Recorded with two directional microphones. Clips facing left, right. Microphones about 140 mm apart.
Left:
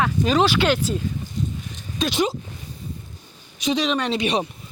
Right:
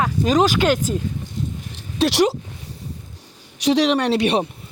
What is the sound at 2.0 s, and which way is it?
Speech, 70° right (ahead or behind).